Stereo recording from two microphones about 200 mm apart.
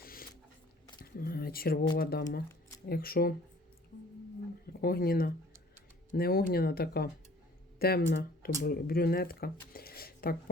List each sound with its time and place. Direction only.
0.0 s a sound: 45° left (ahead or behind)
1.1 s speech: 50° left (ahead or behind)
4.6 s speech: 50° left (ahead or behind)